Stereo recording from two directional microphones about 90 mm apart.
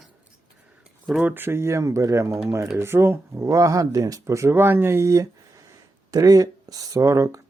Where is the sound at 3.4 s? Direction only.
35° right (ahead or behind).